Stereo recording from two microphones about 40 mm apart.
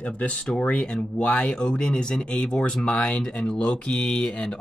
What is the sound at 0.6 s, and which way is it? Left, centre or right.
Speech, left.